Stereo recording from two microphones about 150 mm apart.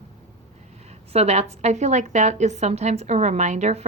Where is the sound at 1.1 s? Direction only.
45° right (ahead or behind).